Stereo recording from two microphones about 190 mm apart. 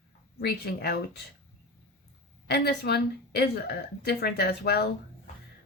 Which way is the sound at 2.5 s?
60° left (ahead or behind).